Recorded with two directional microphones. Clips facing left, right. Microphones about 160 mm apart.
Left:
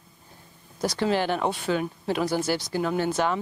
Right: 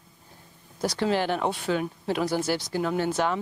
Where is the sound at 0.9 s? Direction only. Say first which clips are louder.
Left 1 dB; 15° left (ahead or behind).